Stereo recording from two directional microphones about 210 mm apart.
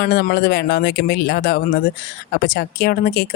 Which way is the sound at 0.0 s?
45° left (ahead or behind).